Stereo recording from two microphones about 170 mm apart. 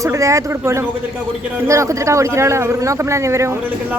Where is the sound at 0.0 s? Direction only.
20° right (ahead or behind).